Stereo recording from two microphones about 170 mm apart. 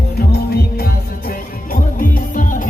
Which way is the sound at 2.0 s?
55° left (ahead or behind).